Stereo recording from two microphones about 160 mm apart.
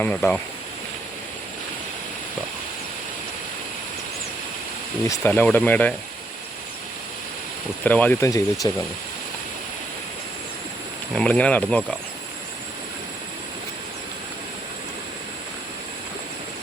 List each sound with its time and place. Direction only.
0.0 s speech: 10° left (ahead or behind)
5.0 s speech: 15° left (ahead or behind)
7.9 s speech: 10° left (ahead or behind)
8.6 s speech: 25° left (ahead or behind)
11.1 s speech: 5° left (ahead or behind)